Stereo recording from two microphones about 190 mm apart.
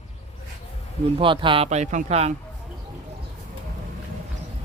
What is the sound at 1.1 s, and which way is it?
Speech, 25° right (ahead or behind).